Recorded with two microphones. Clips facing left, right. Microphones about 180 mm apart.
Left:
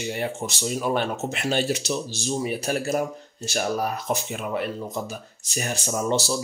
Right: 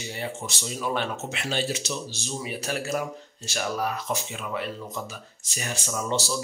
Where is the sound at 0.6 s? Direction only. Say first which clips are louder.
Left 4 dB; 50° left (ahead or behind).